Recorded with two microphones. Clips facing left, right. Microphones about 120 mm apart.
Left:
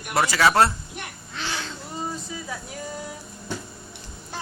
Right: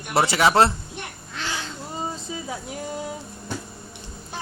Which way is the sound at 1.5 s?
20° right (ahead or behind).